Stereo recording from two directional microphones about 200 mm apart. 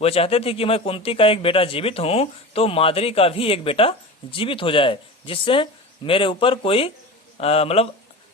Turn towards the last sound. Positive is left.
turn(degrees=30)  # may be behind; listen again after turning